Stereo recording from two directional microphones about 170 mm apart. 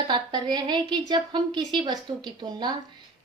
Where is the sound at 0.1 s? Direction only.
25° right (ahead or behind).